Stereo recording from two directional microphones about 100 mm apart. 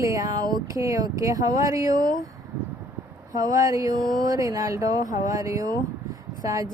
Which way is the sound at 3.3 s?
35° right (ahead or behind).